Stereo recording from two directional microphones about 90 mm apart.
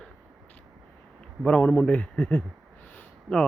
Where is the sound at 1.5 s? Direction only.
15° left (ahead or behind).